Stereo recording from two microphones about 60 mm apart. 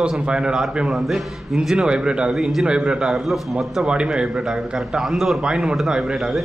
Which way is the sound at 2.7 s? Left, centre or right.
Centre.